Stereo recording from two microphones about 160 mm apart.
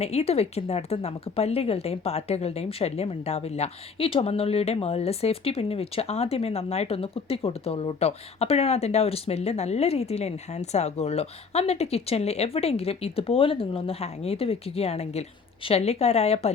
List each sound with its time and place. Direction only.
0.0 s speech: 40° left (ahead or behind)